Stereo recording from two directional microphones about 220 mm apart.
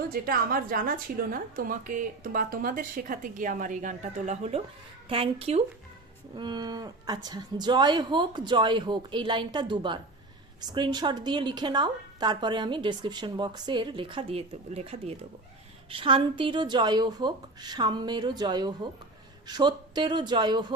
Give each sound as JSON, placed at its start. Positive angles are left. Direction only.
{"t": 0.1, "sound": "a woman's voice", "side_deg": -40}